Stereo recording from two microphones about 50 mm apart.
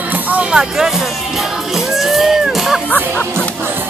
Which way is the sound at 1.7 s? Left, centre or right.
Centre.